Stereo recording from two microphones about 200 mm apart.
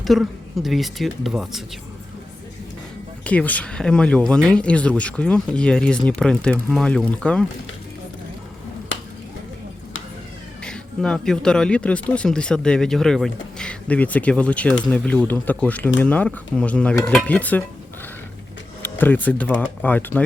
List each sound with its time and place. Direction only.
0.0 s speech: centre (ahead or behind)
3.2 s speech: 5° left (ahead or behind)
8.9 s finger snapping: 70° left (ahead or behind)
10.6 s speech: 5° left (ahead or behind)
16.0 s dishes: 5° left (ahead or behind)
18.8 s speech: 10° left (ahead or behind)
19.8 s dishes: 10° left (ahead or behind)